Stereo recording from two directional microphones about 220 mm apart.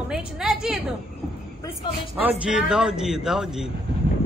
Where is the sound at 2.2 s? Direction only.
5° right (ahead or behind).